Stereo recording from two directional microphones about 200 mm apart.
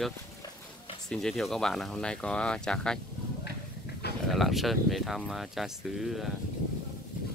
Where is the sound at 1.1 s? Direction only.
Centre (ahead or behind).